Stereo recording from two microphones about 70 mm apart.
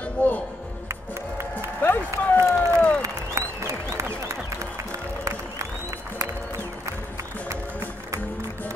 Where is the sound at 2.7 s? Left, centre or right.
Centre.